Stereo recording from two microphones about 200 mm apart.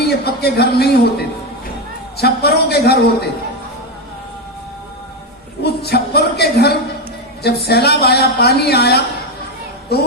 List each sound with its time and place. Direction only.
0.0 s a man's voice: 55° left (ahead or behind)
2.1 s a woman's voice: 55° left (ahead or behind)
5.6 s a woman's voice: 55° left (ahead or behind)